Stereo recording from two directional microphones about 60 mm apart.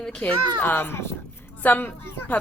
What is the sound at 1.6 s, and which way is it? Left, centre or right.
Speech, left.